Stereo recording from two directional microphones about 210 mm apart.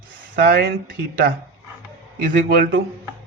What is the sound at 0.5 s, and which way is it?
Speech, 50° right (ahead or behind).